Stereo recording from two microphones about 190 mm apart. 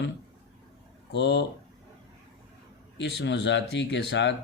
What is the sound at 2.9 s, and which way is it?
Speech, 65° left (ahead or behind).